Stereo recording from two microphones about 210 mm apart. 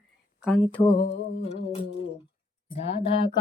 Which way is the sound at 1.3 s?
30° left (ahead or behind).